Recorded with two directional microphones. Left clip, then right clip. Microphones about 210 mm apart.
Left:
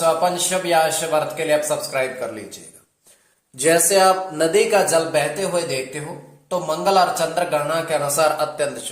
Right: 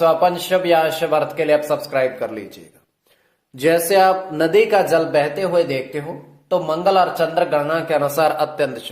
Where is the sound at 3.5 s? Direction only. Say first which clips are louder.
Right 1 dB; 40° right (ahead or behind).